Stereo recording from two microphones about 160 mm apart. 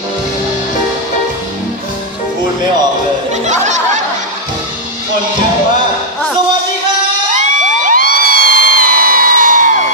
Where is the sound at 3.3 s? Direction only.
45° right (ahead or behind).